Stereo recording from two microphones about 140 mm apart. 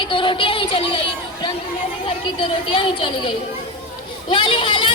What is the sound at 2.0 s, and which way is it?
A child's voice, 40° left (ahead or behind).